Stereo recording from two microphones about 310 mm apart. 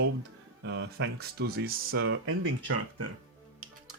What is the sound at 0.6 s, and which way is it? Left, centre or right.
Speech, right.